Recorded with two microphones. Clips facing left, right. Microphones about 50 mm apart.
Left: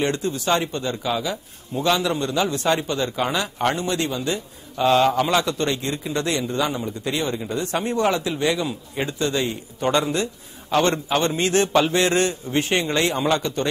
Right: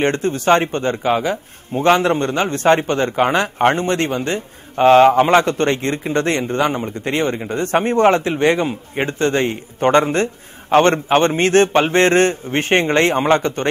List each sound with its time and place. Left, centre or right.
0.0 s speech: right